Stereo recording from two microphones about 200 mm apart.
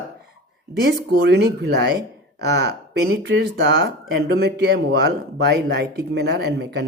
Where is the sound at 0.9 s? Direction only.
55° right (ahead or behind).